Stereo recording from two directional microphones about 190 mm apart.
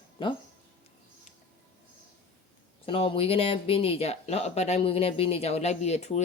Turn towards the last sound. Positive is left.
turn(degrees=35)  # may be behind; listen again after turning